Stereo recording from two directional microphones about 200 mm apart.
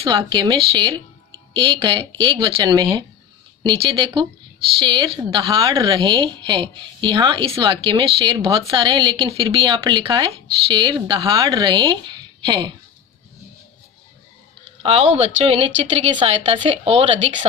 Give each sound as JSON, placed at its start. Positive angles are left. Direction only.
{"t": 0.0, "sound": "a woman's voice", "side_deg": -25}
{"t": 14.8, "sound": "a woman's voice", "side_deg": -30}